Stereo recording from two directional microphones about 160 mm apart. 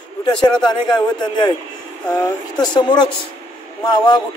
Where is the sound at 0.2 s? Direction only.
25° left (ahead or behind).